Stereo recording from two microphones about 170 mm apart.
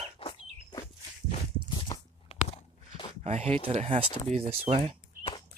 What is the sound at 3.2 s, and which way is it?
Speech, 40° right (ahead or behind).